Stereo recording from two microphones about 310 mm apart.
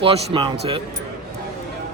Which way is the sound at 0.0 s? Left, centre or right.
Centre.